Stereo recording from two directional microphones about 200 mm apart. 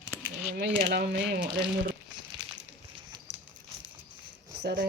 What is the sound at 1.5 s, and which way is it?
Speech, 5° right (ahead or behind).